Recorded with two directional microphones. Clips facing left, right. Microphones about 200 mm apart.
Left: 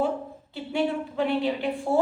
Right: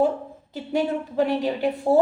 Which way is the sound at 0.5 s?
40° right (ahead or behind).